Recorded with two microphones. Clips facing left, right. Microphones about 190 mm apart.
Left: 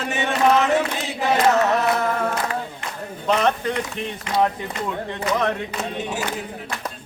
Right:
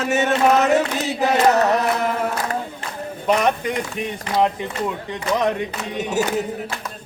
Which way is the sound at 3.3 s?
10° right (ahead or behind).